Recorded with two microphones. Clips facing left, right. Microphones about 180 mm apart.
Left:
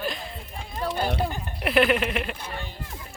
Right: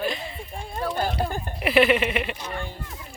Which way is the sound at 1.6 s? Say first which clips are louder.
Right 2 dB; centre (ahead or behind).